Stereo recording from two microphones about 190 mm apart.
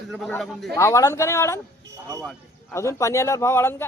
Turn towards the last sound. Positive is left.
turn(degrees=10)  # may be behind; listen again after turning